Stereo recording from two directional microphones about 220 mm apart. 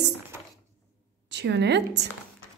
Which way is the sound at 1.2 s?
50° right (ahead or behind).